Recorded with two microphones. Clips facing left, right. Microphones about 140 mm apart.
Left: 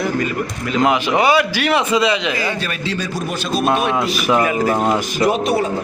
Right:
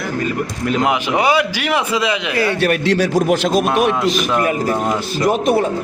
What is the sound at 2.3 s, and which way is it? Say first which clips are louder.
A man's voice: right 6 dB; 65° right (ahead or behind).